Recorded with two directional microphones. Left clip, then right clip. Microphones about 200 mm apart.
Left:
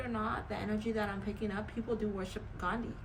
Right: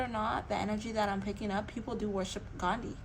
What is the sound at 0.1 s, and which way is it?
A woman's voice, 25° right (ahead or behind).